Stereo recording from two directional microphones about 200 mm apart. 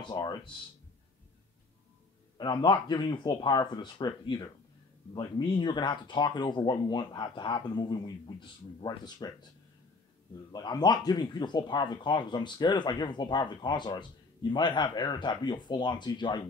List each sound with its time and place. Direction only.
0.0 s speech: 20° left (ahead or behind)
2.3 s speech: 20° left (ahead or behind)
10.5 s speech: 20° left (ahead or behind)